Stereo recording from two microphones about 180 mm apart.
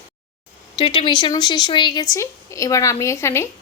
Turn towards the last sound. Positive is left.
turn(degrees=15)  # may be behind; listen again after turning